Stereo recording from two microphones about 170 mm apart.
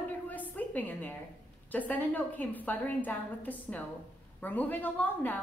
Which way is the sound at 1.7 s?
10° left (ahead or behind).